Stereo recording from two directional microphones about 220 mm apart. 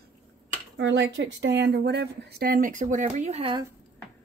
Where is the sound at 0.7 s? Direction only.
55° right (ahead or behind); by 3.6 s 25° right (ahead or behind).